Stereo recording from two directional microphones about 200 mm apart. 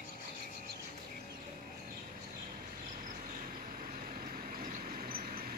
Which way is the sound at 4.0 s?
45° right (ahead or behind).